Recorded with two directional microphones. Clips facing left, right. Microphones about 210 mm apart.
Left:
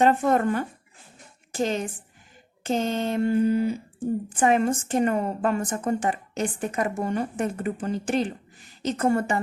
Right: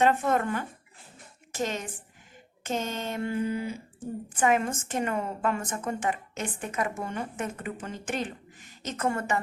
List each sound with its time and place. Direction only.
0.0 s a woman's voice: 35° left (ahead or behind)